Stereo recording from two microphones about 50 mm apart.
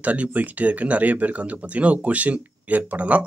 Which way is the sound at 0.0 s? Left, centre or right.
Right.